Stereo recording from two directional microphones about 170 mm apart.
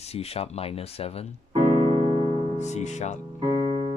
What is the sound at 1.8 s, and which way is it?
Keyboard, 25° left (ahead or behind).